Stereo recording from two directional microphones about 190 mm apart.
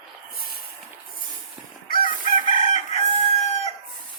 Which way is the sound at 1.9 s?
45° left (ahead or behind).